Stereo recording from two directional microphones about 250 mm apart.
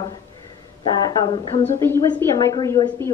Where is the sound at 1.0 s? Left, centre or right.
Centre.